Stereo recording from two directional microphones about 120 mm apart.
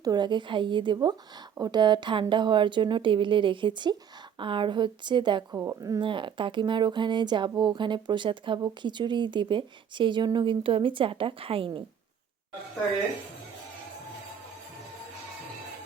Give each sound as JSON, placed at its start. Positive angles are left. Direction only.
{"t": 0.0, "sound": "speech", "side_deg": -35}
{"t": 5.5, "sound": "speech", "side_deg": -25}
{"t": 6.0, "sound": "speech", "side_deg": -45}